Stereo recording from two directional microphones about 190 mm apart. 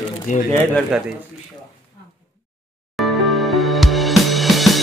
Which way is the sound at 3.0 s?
Centre (ahead or behind).